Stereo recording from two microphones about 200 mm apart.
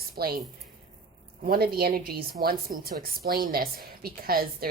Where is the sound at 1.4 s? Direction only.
50° right (ahead or behind).